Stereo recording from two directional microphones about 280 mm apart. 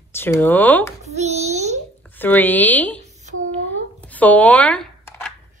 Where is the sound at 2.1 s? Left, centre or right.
Centre.